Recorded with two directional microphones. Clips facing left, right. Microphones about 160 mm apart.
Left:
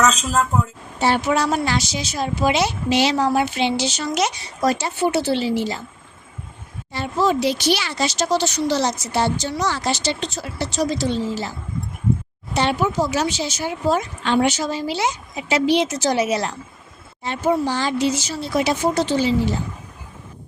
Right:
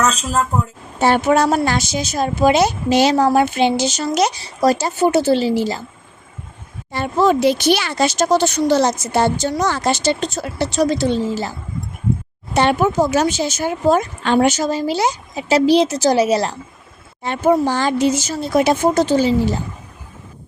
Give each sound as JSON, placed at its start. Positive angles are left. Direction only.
{"t": 0.2, "sound": "a woman's voice", "side_deg": -5}
{"t": 0.9, "sound": "a woman's voice", "side_deg": -50}
{"t": 6.9, "sound": "a woman's voice", "side_deg": -55}
{"t": 12.5, "sound": "a woman's voice", "side_deg": -55}
{"t": 17.2, "sound": "a woman's voice", "side_deg": -50}